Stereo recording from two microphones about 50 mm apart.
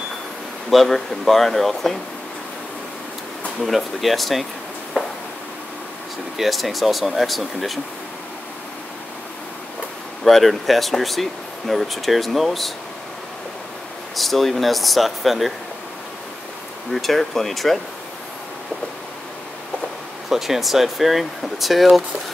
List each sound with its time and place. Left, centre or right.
0.7 s speech: centre
3.6 s speech: centre
6.3 s speech: centre
10.2 s speech: centre
14.1 s speech: centre
16.9 s speech: centre
20.2 s speech: centre